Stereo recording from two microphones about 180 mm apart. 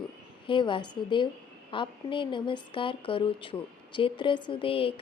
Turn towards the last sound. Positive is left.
turn(degrees=30)  # may be behind; listen again after turning